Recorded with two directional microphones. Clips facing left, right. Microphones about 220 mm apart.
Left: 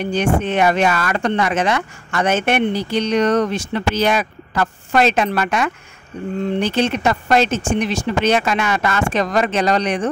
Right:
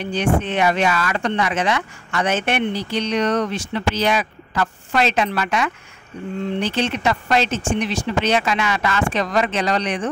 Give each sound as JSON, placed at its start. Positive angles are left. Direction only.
{"t": 0.0, "sound": "speech", "side_deg": 45}